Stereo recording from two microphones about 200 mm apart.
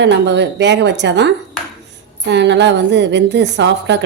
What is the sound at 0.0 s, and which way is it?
A woman's voice, 60° right (ahead or behind).